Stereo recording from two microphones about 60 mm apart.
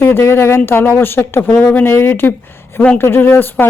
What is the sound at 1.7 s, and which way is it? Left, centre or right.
Speech, left.